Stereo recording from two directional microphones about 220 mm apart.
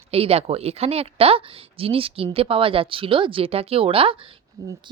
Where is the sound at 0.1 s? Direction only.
25° right (ahead or behind).